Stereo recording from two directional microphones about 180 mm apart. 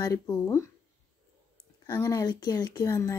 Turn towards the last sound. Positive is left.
turn(degrees=15)  # may be behind; listen again after turning